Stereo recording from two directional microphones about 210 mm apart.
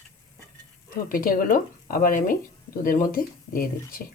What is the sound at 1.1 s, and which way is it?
Speech, 45° left (ahead or behind).